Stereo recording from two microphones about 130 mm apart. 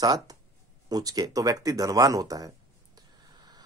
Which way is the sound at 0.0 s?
30° right (ahead or behind).